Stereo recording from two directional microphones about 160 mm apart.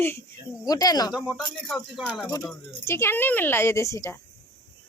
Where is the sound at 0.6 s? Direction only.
25° left (ahead or behind).